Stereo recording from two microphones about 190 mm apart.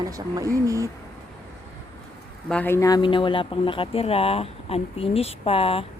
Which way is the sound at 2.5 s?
10° left (ahead or behind).